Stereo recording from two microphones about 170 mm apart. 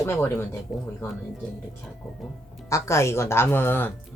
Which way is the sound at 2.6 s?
15° left (ahead or behind).